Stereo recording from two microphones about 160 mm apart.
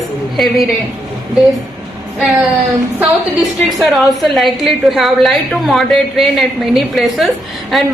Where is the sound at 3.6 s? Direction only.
Centre (ahead or behind).